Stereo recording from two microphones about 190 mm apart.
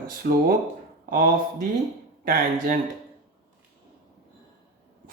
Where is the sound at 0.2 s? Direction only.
50° right (ahead or behind).